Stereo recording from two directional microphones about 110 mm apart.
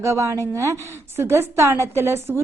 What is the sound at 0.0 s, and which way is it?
A woman's voice, 25° right (ahead or behind).